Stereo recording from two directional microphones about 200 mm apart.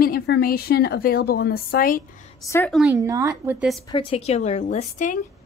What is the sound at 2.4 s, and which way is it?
Speech, 10° left (ahead or behind).